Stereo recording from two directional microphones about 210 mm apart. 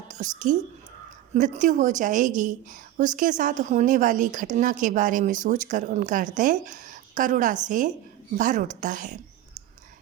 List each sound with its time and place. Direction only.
0.1 s a woman's voice: 35° right (ahead or behind)